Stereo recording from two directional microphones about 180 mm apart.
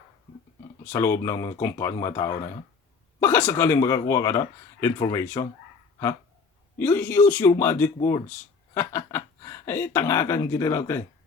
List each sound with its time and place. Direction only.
0.9 s speech: 15° left (ahead or behind)
6.7 s speech: 10° left (ahead or behind)